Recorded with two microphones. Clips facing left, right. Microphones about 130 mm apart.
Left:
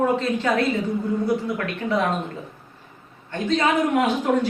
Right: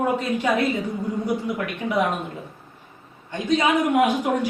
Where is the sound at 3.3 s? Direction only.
15° right (ahead or behind).